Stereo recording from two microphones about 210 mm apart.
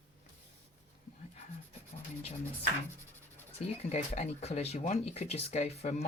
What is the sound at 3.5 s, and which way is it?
Speech, 30° left (ahead or behind).